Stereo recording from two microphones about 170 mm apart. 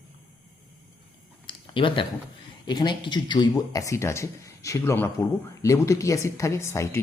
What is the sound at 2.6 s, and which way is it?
Speech, 25° left (ahead or behind).